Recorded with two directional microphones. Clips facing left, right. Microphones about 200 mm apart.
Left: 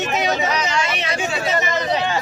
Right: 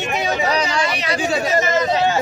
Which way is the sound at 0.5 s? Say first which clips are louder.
Right 2 dB; 35° right (ahead or behind).